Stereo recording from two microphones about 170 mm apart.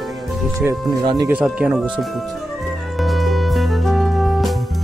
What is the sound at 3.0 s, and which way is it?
Music, centre (ahead or behind).